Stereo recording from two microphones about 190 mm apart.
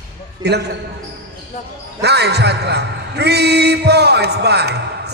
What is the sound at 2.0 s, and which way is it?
A man's voice, 60° right (ahead or behind).